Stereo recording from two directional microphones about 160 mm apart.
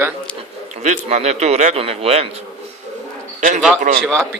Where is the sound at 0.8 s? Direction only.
45° right (ahead or behind).